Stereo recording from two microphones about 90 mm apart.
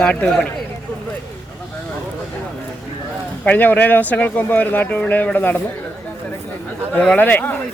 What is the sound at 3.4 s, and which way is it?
Speech, 20° left (ahead or behind).